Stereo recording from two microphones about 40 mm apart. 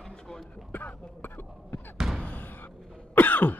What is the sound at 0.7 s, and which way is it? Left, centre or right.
Cough, left.